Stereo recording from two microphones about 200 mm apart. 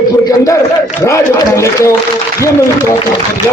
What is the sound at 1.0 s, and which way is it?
Speech, 15° left (ahead or behind).